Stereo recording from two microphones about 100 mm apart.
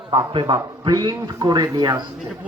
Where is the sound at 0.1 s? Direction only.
70° right (ahead or behind).